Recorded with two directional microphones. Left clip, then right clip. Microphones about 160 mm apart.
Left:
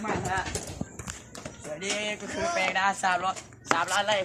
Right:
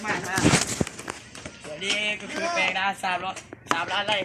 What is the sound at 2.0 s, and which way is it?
Speech, 10° right (ahead or behind).